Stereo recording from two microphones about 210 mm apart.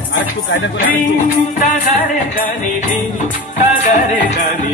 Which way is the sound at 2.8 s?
35° left (ahead or behind).